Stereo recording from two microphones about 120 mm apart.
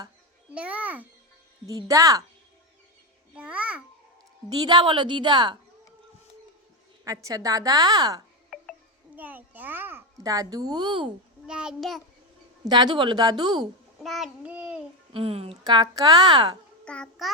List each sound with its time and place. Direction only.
0.5 s a child's voice: 10° right (ahead or behind)
1.6 s a woman's voice: 30° right (ahead or behind)
3.3 s a child's voice: 10° right (ahead or behind)
4.4 s a woman's voice: 35° right (ahead or behind)
7.0 s a woman's voice: 25° right (ahead or behind)
9.1 s a child's voice: 15° right (ahead or behind)
10.2 s a woman's voice: 30° right (ahead or behind)
11.4 s a child's voice: 5° right (ahead or behind)
12.6 s a woman's voice: 35° right (ahead or behind)
14.0 s a child's voice: centre (ahead or behind)
14.4 s a child's voice: 10° right (ahead or behind)
15.1 s a woman's voice: 50° right (ahead or behind)
15.6 s a woman's voice: 35° right (ahead or behind)
16.8 s a child's voice: 10° left (ahead or behind)